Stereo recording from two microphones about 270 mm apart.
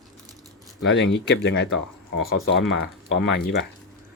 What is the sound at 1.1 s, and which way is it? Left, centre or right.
Speech, left.